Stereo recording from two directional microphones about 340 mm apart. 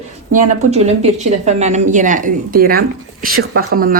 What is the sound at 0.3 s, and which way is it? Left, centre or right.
Speech, centre.